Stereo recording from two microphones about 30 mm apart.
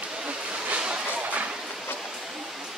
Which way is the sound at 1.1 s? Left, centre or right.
Right.